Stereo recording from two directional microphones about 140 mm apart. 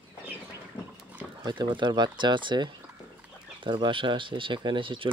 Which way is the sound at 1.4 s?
30° right (ahead or behind).